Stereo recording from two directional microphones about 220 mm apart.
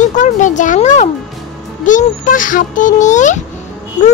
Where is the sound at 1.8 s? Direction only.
35° left (ahead or behind).